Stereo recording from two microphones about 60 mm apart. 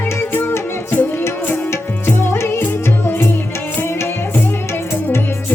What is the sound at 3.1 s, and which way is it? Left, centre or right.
Music, left.